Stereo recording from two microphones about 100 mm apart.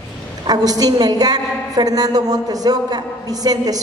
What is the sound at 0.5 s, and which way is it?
A woman's voice, 40° right (ahead or behind).